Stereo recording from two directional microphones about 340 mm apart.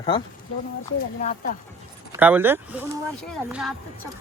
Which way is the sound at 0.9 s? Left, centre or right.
Left.